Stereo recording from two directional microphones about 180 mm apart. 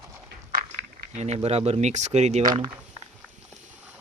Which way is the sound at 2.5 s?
25° right (ahead or behind).